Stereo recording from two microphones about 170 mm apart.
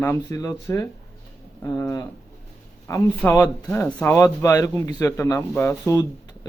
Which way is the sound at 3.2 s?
10° left (ahead or behind).